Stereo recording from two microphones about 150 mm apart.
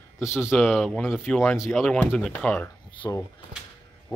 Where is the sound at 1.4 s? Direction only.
20° left (ahead or behind).